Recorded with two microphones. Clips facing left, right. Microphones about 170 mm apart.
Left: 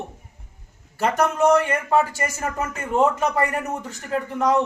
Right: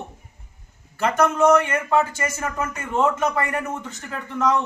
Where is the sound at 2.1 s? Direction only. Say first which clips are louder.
Even; 35° left (ahead or behind).